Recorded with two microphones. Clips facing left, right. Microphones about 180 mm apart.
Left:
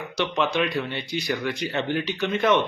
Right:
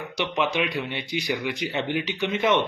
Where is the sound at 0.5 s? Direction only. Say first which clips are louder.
Left 2 dB; 15° right (ahead or behind).